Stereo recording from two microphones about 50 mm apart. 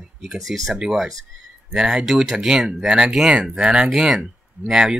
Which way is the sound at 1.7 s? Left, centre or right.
Centre.